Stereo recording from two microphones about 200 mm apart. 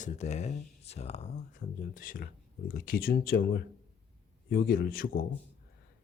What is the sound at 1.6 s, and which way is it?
Speech, 45° left (ahead or behind).